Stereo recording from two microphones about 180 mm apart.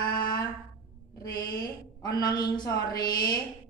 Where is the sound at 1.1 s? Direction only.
20° left (ahead or behind).